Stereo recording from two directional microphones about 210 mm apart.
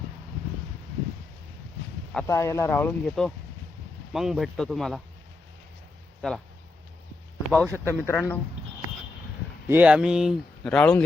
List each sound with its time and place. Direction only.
2.1 s speech: 15° left (ahead or behind)
6.2 s speech: centre (ahead or behind)
7.5 s speech: 10° left (ahead or behind)
9.6 s speech: 5° right (ahead or behind)